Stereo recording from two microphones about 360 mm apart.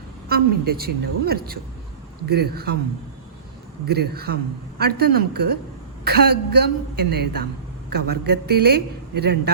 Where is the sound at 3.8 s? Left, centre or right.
Right.